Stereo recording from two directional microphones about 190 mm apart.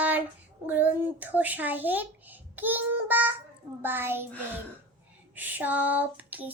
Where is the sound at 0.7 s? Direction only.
10° right (ahead or behind).